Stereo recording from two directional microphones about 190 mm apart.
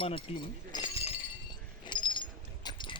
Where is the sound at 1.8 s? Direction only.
25° left (ahead or behind).